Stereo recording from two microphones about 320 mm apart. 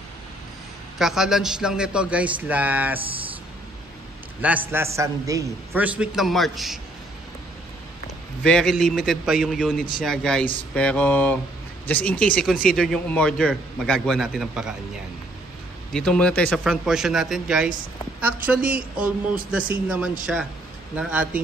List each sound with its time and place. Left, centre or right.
0.9 s a man's voice: centre
4.4 s a man's voice: centre
8.5 s a man's voice: centre
15.9 s a man's voice: centre